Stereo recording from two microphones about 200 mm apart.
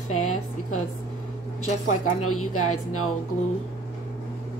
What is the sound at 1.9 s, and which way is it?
A woman's voice, 90° left.